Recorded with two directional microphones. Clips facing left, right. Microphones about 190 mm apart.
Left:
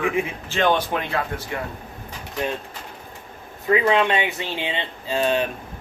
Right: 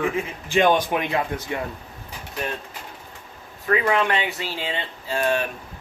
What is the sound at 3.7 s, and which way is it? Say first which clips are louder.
Speech: left 2 dB; 20° left (ahead or behind).